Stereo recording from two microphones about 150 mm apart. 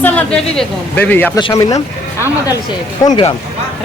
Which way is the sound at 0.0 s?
10° left (ahead or behind).